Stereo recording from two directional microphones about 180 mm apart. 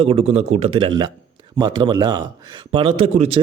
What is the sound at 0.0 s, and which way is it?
A man's voice, 35° right (ahead or behind).